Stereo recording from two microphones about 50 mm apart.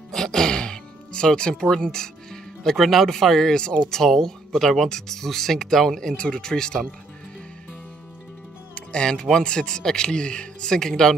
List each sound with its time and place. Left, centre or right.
0.1 s music: centre
1.5 s speech: centre
8.7 s speech: centre